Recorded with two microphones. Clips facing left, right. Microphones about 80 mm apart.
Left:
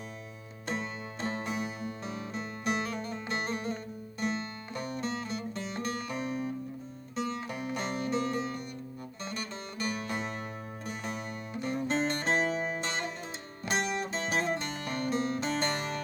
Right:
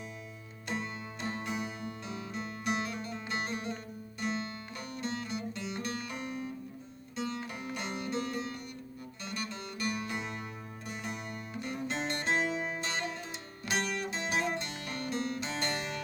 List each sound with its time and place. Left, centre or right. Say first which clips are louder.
0.7 s music: left 2 dB; left